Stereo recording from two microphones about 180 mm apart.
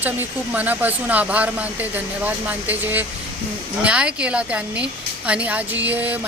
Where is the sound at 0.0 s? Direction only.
10° right (ahead or behind).